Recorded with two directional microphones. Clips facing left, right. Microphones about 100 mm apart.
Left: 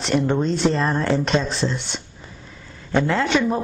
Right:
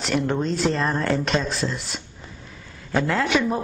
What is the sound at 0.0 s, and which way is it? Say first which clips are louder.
A man's voice: left 3 dB; centre (ahead or behind).